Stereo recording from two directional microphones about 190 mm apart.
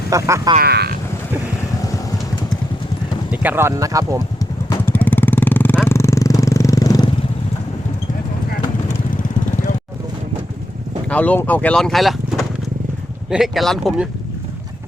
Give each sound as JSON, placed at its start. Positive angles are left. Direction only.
{"t": 0.1, "sound": "speech", "side_deg": -15}
{"t": 0.6, "sound": "speech", "side_deg": -55}
{"t": 3.3, "sound": "speech", "side_deg": -10}
{"t": 4.4, "sound": "vehicle", "side_deg": 15}
{"t": 11.1, "sound": "speech", "side_deg": 10}